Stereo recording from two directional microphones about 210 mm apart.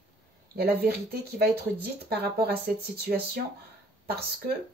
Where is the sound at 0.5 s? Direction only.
50° right (ahead or behind).